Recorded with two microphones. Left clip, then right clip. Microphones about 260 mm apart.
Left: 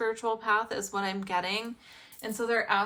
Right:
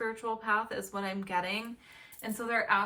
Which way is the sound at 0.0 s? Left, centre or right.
Centre.